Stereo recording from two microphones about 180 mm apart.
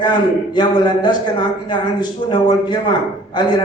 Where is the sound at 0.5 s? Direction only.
25° left (ahead or behind).